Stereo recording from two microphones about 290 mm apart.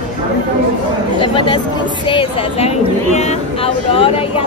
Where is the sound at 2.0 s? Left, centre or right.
Centre.